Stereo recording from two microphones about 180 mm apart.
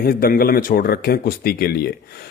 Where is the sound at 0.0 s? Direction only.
55° left (ahead or behind).